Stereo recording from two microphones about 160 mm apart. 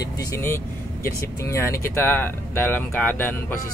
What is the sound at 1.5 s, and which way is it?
Speech, 15° left (ahead or behind).